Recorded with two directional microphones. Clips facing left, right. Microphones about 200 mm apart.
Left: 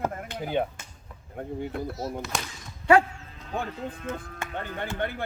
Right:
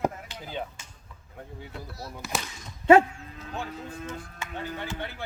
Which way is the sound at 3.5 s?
55° left (ahead or behind).